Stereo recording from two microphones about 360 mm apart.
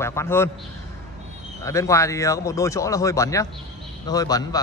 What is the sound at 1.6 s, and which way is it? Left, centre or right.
Speech, centre.